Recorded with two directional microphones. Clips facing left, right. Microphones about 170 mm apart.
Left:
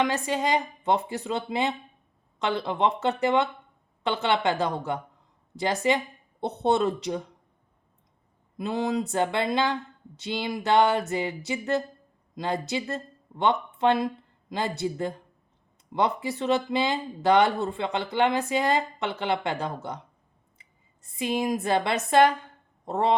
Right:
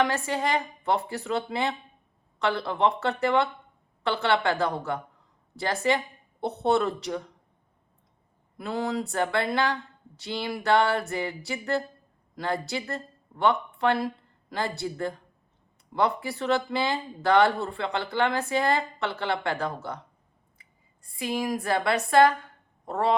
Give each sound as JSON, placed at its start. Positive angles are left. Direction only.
{"t": 0.0, "sound": "speech", "side_deg": 20}
{"t": 8.5, "sound": "speech", "side_deg": 20}